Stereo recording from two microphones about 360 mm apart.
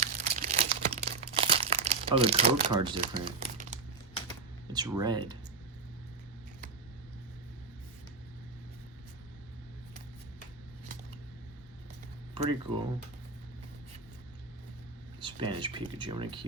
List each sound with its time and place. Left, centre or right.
0.0 s crumpling: right
4.7 s speech: centre
12.3 s speech: centre
15.2 s speech: centre